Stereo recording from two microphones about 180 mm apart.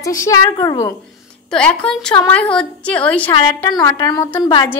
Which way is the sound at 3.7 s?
20° left (ahead or behind).